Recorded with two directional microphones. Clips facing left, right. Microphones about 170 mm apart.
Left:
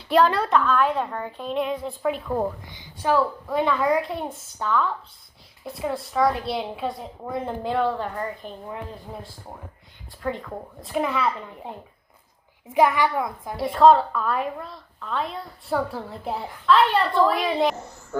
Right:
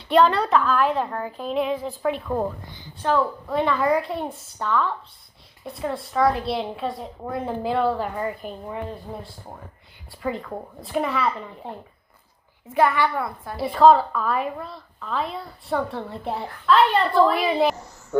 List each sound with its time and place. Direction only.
0.1 s a woman's voice: centre (ahead or behind)
12.7 s a woman's voice: 15° left (ahead or behind)
13.6 s a woman's voice: centre (ahead or behind)